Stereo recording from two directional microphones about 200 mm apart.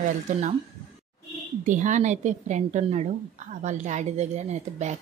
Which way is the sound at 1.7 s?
40° right (ahead or behind).